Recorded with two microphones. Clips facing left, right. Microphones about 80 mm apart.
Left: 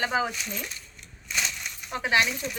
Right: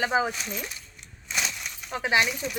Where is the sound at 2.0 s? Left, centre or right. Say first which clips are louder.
Even; centre.